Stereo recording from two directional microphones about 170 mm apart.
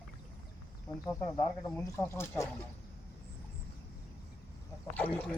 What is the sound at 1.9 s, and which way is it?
Speech, 15° left (ahead or behind).